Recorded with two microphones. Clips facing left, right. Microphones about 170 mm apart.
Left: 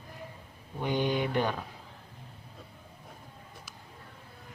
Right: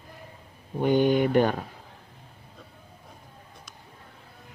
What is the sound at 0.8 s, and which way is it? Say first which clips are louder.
Speech: right 8 dB; 50° right (ahead or behind).